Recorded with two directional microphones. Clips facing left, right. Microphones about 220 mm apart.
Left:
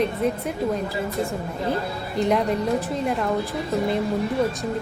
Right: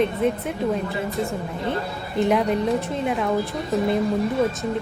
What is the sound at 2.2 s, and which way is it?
A woman's voice, centre (ahead or behind).